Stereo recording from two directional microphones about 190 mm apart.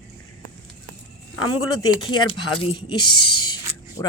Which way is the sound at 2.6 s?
25° left (ahead or behind).